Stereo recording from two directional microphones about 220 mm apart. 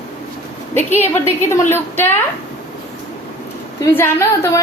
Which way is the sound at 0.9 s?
10° left (ahead or behind).